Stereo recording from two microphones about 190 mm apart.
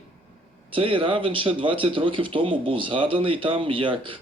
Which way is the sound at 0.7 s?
30° right (ahead or behind).